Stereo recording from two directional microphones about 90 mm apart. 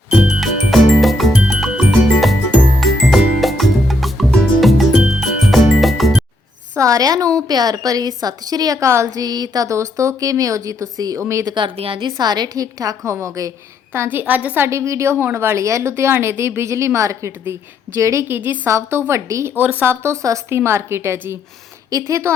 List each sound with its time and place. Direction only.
0.1 s music: 5° right (ahead or behind)
6.7 s a woman's voice: 40° right (ahead or behind)
9.2 s a woman's voice: 50° right (ahead or behind)
11.2 s a woman's voice: 30° right (ahead or behind)
11.4 s a woman's voice: 60° right (ahead or behind); by 12.1 s 85° right
12.1 s a woman's voice: 50° right (ahead or behind)
13.0 s a woman's voice: 30° right (ahead or behind)
14.7 s a woman's voice: 35° right (ahead or behind)
19.5 s speech: 20° right (ahead or behind)
21.8 s a woman's voice: 40° right (ahead or behind)